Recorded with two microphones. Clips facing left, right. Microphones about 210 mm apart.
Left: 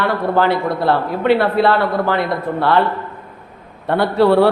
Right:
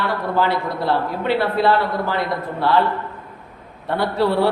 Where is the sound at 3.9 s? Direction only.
60° left (ahead or behind).